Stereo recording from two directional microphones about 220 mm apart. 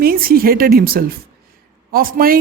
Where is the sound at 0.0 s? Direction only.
40° right (ahead or behind).